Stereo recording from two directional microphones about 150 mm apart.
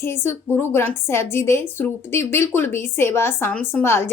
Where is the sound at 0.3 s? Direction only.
15° left (ahead or behind).